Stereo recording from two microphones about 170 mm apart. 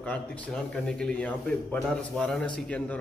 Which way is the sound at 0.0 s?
10° left (ahead or behind).